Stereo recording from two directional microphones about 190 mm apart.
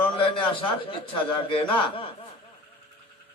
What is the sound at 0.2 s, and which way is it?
A man's voice, 30° left (ahead or behind).